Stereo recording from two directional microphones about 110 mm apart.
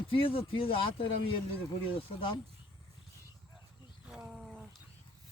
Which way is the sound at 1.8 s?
55° left (ahead or behind).